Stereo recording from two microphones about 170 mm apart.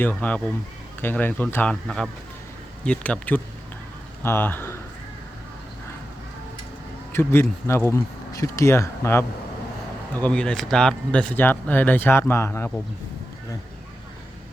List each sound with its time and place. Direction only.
0.0 s speech: 10° left (ahead or behind)
7.1 s speech: 15° left (ahead or behind)